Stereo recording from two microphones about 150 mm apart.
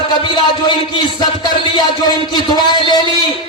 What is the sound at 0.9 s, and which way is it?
A man's voice, 30° left (ahead or behind).